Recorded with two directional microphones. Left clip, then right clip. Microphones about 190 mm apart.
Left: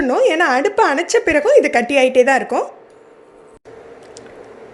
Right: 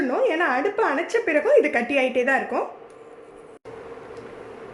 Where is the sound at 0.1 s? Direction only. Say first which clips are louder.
Left 9 dB; 45° left (ahead or behind).